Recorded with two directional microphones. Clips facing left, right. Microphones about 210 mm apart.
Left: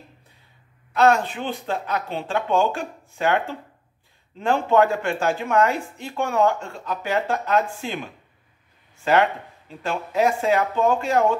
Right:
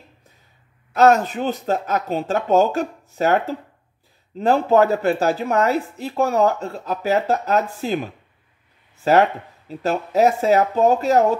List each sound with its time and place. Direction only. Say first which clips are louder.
0.9 s speech: right 3 dB; 45° right (ahead or behind)